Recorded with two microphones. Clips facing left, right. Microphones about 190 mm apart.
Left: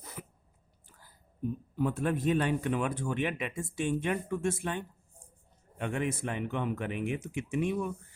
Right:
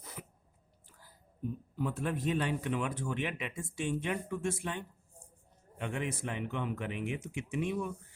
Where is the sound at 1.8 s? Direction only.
50° left (ahead or behind).